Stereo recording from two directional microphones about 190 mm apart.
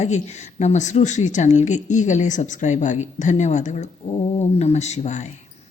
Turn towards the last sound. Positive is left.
turn(degrees=35)  # may be behind; listen again after turning